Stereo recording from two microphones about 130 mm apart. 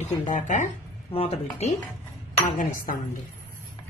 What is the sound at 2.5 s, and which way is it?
Speech, 90° left.